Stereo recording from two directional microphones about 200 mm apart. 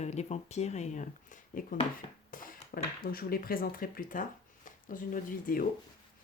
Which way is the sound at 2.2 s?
45° left (ahead or behind).